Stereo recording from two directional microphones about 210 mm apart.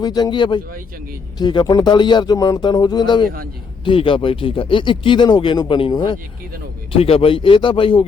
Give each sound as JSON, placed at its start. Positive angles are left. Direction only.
{"t": 0.0, "sound": "speech", "side_deg": 20}